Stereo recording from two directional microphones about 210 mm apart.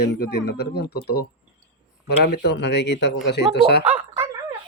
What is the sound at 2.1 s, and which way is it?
Speech, 50° left (ahead or behind).